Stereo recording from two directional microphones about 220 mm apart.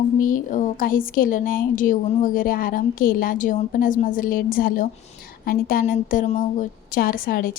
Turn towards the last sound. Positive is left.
turn(degrees=40)  # may be behind; listen again after turning